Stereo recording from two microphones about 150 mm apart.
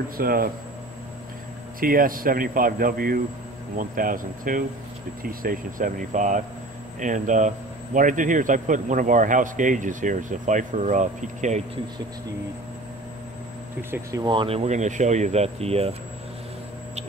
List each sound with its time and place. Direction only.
0.2 s speech: 80° right
1.8 s a man's voice: 70° right (ahead or behind); by 11.6 s 55° right (ahead or behind)
14.2 s speech: 35° right (ahead or behind)